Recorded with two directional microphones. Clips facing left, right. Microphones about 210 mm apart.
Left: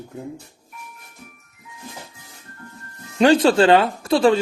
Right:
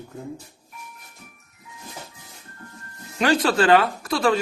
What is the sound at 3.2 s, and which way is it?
Speech, 30° left (ahead or behind).